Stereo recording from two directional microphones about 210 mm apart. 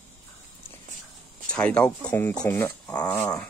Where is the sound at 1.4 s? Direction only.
5° left (ahead or behind).